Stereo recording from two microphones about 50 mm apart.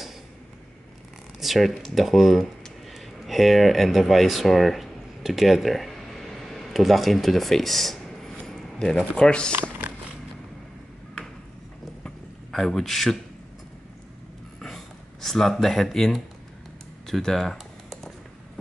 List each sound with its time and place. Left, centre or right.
1.4 s speech: centre
9.6 s a sound: right
12.4 s a man's voice: centre
15.2 s speech: centre
17.0 s typing: centre